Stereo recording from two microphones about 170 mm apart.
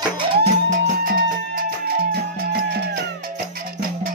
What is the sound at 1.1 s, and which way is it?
Music, 60° right (ahead or behind).